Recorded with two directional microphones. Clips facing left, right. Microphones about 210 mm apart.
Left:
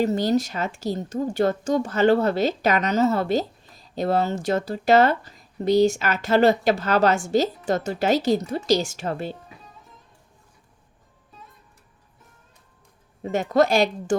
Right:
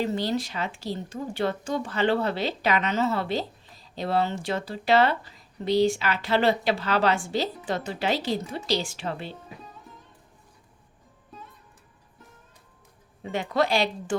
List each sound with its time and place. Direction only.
0.0 s a woman's voice: 45° left (ahead or behind)
11.3 s music: centre (ahead or behind)
13.2 s a woman's voice: 45° left (ahead or behind)